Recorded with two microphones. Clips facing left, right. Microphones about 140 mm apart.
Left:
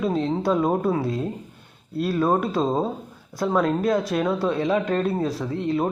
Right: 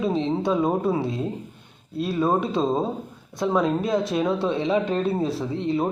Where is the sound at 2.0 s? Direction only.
Centre (ahead or behind).